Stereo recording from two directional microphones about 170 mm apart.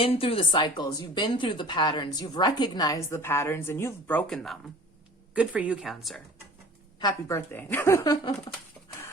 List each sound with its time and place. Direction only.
0.0 s speech: 35° left (ahead or behind); by 6.2 s centre (ahead or behind)
7.0 s a woman's voice: 15° left (ahead or behind)